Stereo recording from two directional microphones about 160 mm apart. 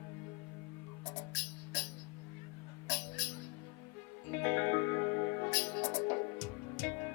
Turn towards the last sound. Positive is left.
turn(degrees=10)  # may be behind; listen again after turning